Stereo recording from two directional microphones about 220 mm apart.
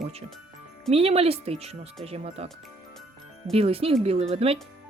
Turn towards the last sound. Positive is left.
turn(degrees=-25)  # may be behind; listen again after turning